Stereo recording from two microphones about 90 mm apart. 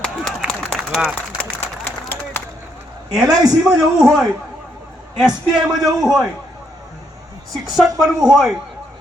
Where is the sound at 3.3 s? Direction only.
45° right (ahead or behind).